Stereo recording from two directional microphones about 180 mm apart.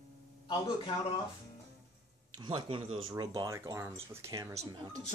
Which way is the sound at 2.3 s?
25° right (ahead or behind).